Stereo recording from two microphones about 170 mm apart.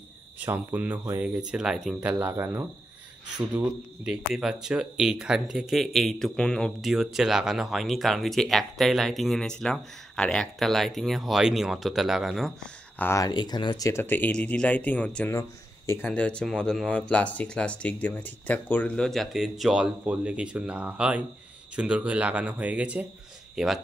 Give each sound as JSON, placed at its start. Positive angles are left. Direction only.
{"t": 0.4, "sound": "speech", "side_deg": -10}
{"t": 2.1, "sound": "speech", "side_deg": -15}
{"t": 13.0, "sound": "speech", "side_deg": 20}